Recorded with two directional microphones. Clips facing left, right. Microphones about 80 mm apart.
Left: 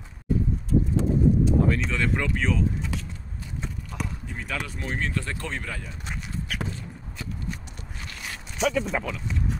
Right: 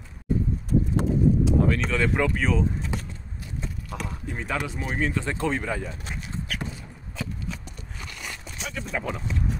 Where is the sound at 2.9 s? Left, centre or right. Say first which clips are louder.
Right 1 dB; right.